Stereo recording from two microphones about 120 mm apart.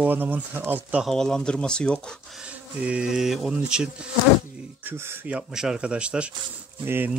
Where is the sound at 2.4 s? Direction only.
10° right (ahead or behind).